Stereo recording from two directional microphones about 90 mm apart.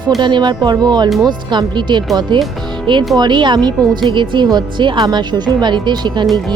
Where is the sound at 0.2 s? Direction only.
55° right (ahead or behind).